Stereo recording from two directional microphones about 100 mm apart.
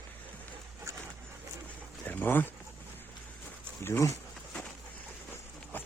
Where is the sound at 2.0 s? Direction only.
20° left (ahead or behind).